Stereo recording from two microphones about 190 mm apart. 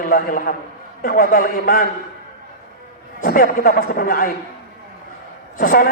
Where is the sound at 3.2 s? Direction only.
50° left (ahead or behind).